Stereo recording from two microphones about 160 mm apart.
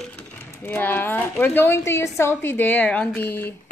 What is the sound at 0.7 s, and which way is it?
A woman's voice, 10° left (ahead or behind).